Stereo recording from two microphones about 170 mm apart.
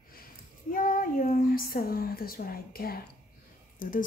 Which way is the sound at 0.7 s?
55° left (ahead or behind).